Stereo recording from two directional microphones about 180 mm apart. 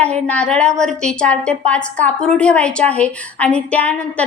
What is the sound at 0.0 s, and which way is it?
A woman's voice, 5° left (ahead or behind).